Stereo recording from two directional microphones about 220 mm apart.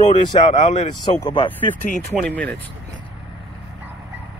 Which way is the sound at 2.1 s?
5° left (ahead or behind).